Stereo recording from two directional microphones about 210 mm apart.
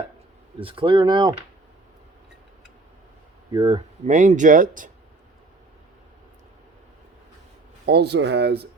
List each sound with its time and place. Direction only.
0.6 s speech: 25° right (ahead or behind)
3.5 s speech: 20° right (ahead or behind); by 4.9 s 40° right (ahead or behind)
7.9 s speech: 50° right (ahead or behind)